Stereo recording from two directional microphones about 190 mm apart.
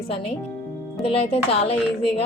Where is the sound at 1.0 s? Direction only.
30° left (ahead or behind).